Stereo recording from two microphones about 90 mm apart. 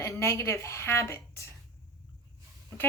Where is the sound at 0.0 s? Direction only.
35° left (ahead or behind).